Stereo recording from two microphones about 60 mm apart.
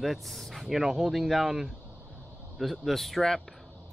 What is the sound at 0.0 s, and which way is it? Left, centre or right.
Speech, centre.